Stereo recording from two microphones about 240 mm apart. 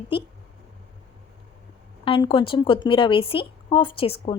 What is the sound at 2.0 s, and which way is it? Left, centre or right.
A woman's voice, left.